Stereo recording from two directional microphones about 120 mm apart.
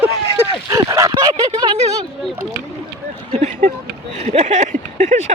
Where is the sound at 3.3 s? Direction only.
70° right (ahead or behind).